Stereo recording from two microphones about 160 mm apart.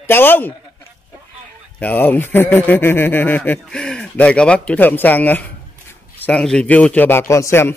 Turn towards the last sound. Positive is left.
turn(degrees=15)  # may be behind; listen again after turning